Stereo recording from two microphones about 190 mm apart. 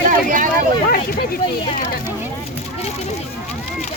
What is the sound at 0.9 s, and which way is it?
Speech, 50° left (ahead or behind).